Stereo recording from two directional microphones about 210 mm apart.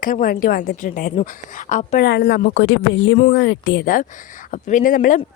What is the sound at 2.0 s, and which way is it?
A woman's voice, 55° left (ahead or behind).